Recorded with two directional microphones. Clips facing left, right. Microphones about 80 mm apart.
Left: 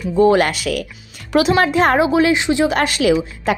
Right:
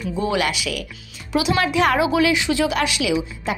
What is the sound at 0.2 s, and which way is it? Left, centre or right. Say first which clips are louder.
A woman's voice: left 9 dB; left.